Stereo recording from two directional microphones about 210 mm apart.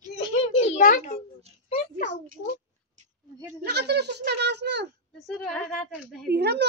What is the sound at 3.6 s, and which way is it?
Speech, 50° right (ahead or behind).